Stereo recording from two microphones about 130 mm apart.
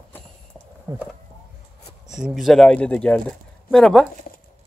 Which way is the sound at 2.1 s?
Centre (ahead or behind).